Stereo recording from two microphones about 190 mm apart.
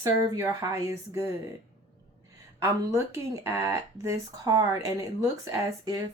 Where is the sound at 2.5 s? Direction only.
15° right (ahead or behind).